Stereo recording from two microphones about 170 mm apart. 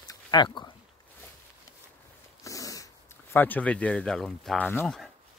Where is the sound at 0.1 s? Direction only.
25° left (ahead or behind).